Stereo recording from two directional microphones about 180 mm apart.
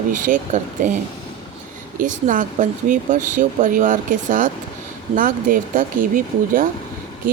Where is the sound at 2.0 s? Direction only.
45° right (ahead or behind).